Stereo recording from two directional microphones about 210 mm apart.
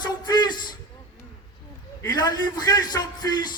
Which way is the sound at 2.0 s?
20° left (ahead or behind).